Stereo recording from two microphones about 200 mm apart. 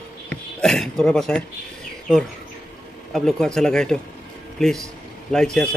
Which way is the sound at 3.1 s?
Centre (ahead or behind).